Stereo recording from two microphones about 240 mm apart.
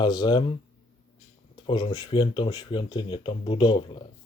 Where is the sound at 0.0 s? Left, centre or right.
Centre.